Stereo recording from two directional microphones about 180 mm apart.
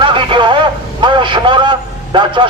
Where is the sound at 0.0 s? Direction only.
25° right (ahead or behind).